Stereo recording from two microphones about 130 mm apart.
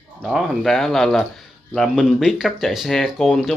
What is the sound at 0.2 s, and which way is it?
Speech, 5° right (ahead or behind).